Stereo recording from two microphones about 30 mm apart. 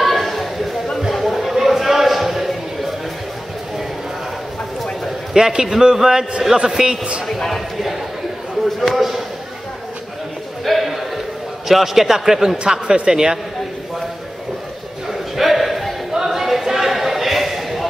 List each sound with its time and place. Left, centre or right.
0.0 s chatter: centre
1.1 s a sound: centre
5.4 s a man's voice: right
7.2 s speech: centre
8.6 s speech: centre
10.6 s a sound: centre
11.6 s a man's voice: centre
12.8 s speech: right
13.1 s a man's voice: right
15.3 s a sound: centre